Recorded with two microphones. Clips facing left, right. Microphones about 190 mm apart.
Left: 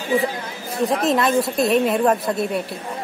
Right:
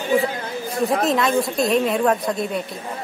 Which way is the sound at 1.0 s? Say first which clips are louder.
Left 3 dB; centre (ahead or behind).